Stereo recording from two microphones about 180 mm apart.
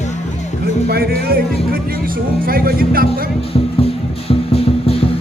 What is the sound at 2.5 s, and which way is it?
Speech, 55° right (ahead or behind).